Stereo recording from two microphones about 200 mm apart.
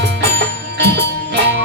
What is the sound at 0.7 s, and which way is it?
Music, 55° right (ahead or behind).